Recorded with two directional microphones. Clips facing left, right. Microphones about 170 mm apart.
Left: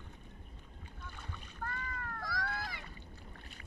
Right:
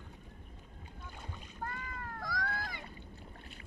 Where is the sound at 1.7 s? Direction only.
15° right (ahead or behind).